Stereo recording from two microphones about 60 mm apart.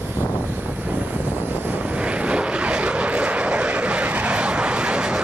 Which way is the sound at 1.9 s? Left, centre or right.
Centre.